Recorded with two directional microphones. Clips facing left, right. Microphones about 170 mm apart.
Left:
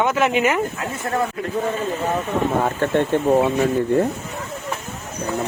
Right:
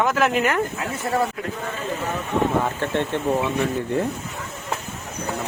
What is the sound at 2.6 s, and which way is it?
Speech, 45° left (ahead or behind).